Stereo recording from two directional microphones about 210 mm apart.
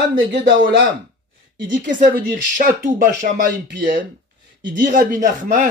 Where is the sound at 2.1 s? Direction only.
40° right (ahead or behind).